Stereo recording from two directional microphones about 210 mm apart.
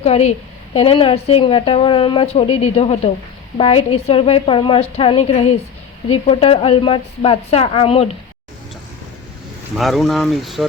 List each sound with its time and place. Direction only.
0.0 s a woman's voice: 30° left (ahead or behind)
9.7 s speech: centre (ahead or behind)